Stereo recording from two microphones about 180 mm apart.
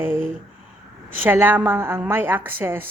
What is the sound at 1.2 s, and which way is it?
A man's voice, 10° right (ahead or behind).